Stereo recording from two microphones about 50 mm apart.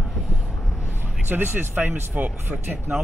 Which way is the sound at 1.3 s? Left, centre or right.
Right.